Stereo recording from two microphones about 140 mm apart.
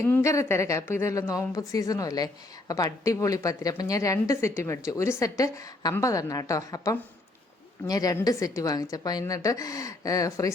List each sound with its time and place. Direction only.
0.0 s speech: 20° left (ahead or behind)